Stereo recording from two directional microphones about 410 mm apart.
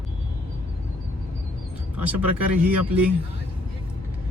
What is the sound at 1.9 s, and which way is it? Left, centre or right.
Speech, centre.